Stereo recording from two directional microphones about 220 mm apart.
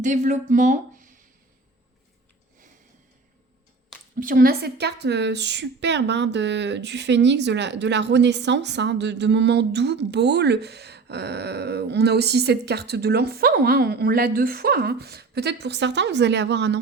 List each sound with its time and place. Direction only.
0.0 s speech: 35° right (ahead or behind)
4.2 s a woman's voice: 40° right (ahead or behind)